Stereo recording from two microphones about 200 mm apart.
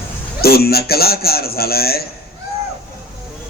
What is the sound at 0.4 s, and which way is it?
A man's voice, 50° left (ahead or behind).